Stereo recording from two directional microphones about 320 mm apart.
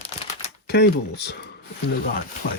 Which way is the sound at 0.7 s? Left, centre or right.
Left.